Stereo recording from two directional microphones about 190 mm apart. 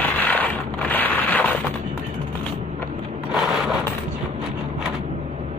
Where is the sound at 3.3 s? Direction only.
Centre (ahead or behind).